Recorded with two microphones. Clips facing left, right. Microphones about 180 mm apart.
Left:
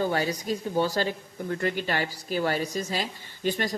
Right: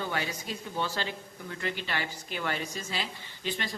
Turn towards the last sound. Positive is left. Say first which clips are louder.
# left 7 dB
turn(degrees=40)  # may be behind; listen again after turning